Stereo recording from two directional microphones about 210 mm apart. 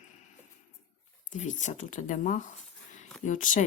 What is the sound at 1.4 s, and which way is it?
Speech, 35° left (ahead or behind).